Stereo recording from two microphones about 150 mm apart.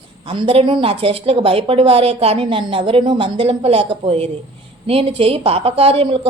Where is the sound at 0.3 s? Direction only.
35° right (ahead or behind).